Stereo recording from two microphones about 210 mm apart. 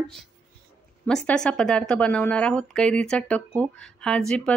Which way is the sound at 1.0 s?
5° left (ahead or behind).